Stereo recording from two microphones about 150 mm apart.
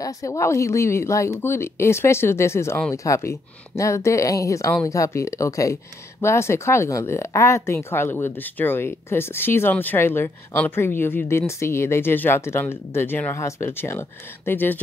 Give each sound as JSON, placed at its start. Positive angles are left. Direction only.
{"t": 0.0, "sound": "speech", "side_deg": 20}